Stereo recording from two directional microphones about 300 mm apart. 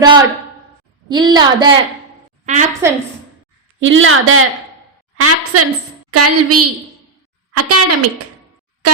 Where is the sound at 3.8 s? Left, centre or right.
Right.